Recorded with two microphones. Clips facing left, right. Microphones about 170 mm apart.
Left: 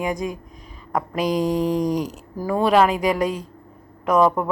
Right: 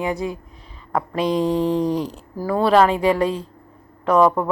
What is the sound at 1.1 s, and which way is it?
Mantra, 30° right (ahead or behind).